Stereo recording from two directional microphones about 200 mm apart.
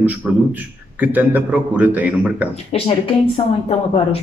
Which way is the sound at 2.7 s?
30° left (ahead or behind).